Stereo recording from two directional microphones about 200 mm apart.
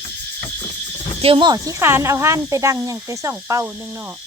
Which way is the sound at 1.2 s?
25° right (ahead or behind).